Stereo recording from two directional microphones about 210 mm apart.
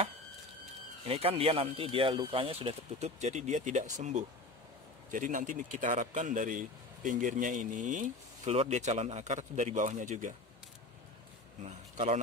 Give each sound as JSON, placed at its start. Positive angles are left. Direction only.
{"t": 1.0, "sound": "a man's voice", "side_deg": -30}
{"t": 11.6, "sound": "a man's voice", "side_deg": -30}